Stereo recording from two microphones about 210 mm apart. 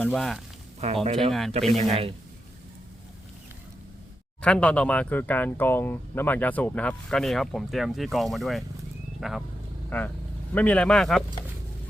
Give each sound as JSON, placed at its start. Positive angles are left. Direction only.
{"t": 0.0, "sound": "speech", "side_deg": 0}
{"t": 0.8, "sound": "speech", "side_deg": -30}
{"t": 1.3, "sound": "speech", "side_deg": 0}
{"t": 1.7, "sound": "speech", "side_deg": -30}
{"t": 4.4, "sound": "speech", "side_deg": 5}